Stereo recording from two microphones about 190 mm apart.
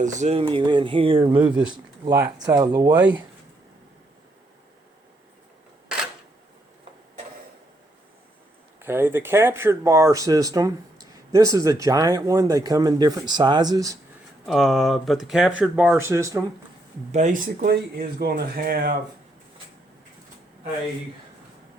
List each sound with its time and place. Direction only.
0.0 s speech: 40° right (ahead or behind); by 3.0 s 20° right (ahead or behind)
8.8 s speech: 10° right (ahead or behind)
14.4 s speech: centre (ahead or behind); by 16.4 s 15° right (ahead or behind)
17.1 s speech: 40° right (ahead or behind)